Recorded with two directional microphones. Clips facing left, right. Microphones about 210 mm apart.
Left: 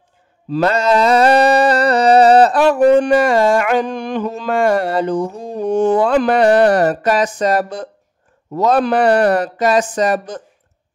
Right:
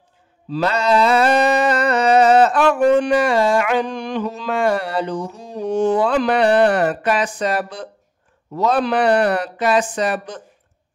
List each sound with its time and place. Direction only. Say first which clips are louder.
0.5 s music: left 3 dB; 45° left (ahead or behind)
7.3 s speech: left 5 dB; 45° left (ahead or behind)